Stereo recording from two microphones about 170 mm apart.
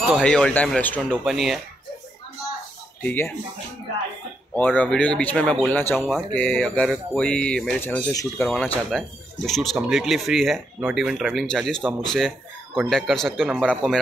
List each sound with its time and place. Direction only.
0.2 s speech: 5° left (ahead or behind)
3.1 s speech: 10° left (ahead or behind)
4.6 s speech: 10° left (ahead or behind)
8.1 s speech: 20° left (ahead or behind)
8.5 s speech: 5° left (ahead or behind)